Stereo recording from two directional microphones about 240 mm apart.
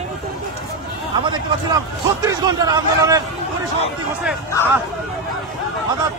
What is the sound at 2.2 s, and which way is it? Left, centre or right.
Speech, centre.